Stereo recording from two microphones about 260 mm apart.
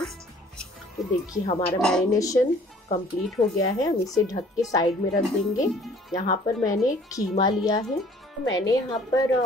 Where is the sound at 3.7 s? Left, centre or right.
Centre.